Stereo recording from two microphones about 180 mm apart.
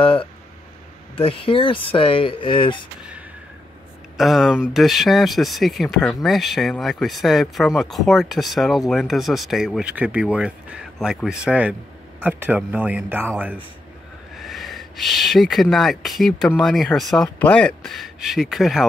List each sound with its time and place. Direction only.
0.0 s speech: 30° left (ahead or behind)
4.2 s a man's voice: centre (ahead or behind)